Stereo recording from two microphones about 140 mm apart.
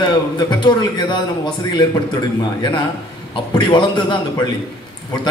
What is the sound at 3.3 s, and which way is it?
Speech, 35° left (ahead or behind).